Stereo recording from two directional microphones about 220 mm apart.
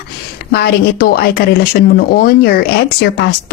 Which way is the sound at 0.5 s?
45° left (ahead or behind).